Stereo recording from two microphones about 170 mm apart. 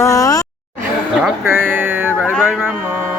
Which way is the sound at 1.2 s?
10° right (ahead or behind).